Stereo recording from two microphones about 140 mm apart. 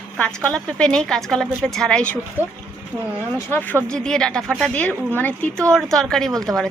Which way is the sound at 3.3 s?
15° left (ahead or behind).